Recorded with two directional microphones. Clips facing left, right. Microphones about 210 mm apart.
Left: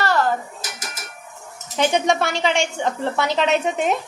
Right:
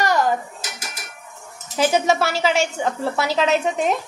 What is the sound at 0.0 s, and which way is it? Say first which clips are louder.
Dishes: right 1 dB; 15° right (ahead or behind).